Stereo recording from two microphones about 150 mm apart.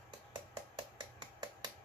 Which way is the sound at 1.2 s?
30° right (ahead or behind).